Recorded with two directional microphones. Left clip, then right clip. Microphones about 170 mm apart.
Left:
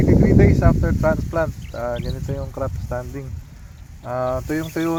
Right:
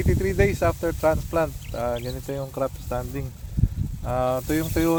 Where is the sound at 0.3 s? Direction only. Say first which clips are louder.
Left 4 dB; 10° left (ahead or behind).